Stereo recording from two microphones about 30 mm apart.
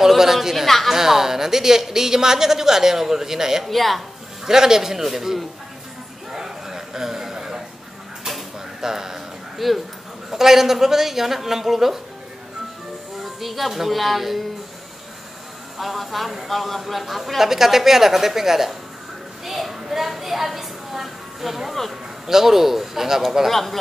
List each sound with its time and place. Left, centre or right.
0.2 s a woman's voice: centre
0.7 s a woman's voice: centre
0.9 s a woman's voice: centre
3.6 s speech: centre
4.5 s a woman's voice: centre
6.3 s a sound: centre
8.8 s speech: centre
9.6 s speech: centre
10.3 s a woman's voice: centre
13.2 s speech: centre
15.8 s speech: centre
17.4 s a woman's voice: centre
23.5 s a woman's voice: centre